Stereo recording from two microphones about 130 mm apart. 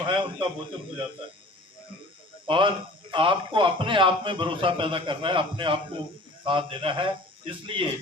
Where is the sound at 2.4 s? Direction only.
40° right (ahead or behind).